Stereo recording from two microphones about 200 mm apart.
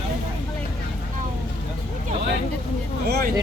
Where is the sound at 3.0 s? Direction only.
55° right (ahead or behind).